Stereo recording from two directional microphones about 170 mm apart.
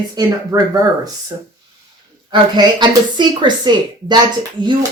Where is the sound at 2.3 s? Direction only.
25° right (ahead or behind).